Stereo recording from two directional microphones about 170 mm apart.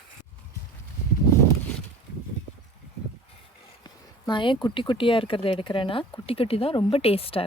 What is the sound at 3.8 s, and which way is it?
Speech, 25° left (ahead or behind).